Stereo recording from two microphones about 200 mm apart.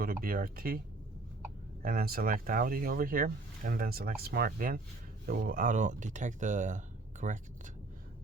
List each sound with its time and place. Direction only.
0.0 s speech: 45° right (ahead or behind)
1.8 s speech: 50° right (ahead or behind)